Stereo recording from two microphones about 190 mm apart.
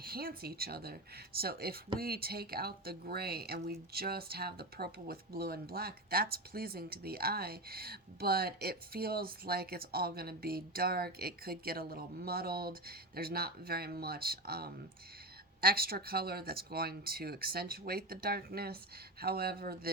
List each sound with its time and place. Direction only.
0.0 s speech: 50° right (ahead or behind)